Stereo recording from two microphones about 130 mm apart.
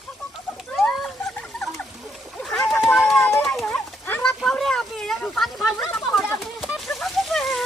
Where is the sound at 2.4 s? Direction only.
5° left (ahead or behind).